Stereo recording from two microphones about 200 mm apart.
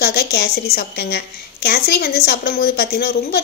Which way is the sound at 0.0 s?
50° left (ahead or behind).